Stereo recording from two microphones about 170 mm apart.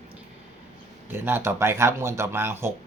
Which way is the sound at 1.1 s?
10° right (ahead or behind).